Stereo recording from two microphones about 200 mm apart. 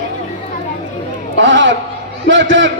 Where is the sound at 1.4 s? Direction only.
70° right (ahead or behind).